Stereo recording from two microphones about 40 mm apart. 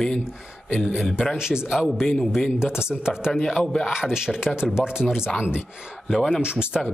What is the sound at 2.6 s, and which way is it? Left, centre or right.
Speech, centre.